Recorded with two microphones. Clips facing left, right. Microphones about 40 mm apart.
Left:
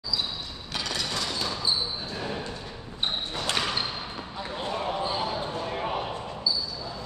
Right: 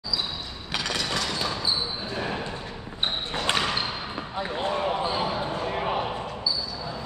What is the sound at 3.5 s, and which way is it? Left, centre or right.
Basketball bounce, centre.